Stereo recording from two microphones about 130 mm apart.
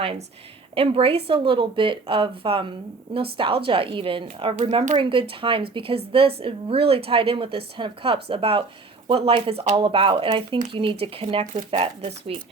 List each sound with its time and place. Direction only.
0.8 s speech: 45° right (ahead or behind)